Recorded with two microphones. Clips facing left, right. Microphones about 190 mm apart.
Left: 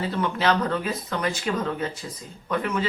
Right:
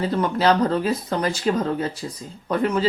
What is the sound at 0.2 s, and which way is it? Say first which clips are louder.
Speech: right 4 dB; 35° right (ahead or behind).